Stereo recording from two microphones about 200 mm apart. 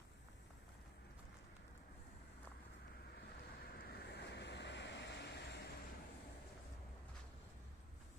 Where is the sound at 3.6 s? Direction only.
50° left (ahead or behind).